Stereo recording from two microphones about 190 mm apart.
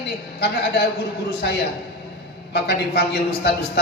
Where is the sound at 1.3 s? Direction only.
55° left (ahead or behind).